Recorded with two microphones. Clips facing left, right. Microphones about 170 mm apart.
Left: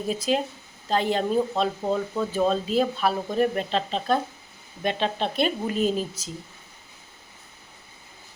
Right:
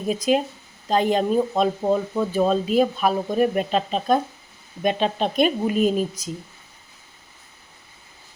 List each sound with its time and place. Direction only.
0.1 s speech: 15° right (ahead or behind)